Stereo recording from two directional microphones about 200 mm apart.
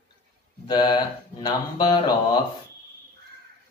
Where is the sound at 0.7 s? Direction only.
20° left (ahead or behind).